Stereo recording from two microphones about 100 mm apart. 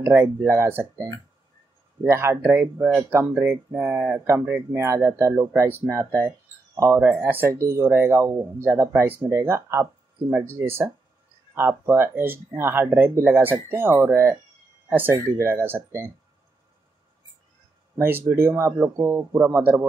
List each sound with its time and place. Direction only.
0.0 s speech: 25° right (ahead or behind)
4.8 s speech: 30° right (ahead or behind)
6.9 s speech: 20° right (ahead or behind)
17.9 s speech: 20° right (ahead or behind)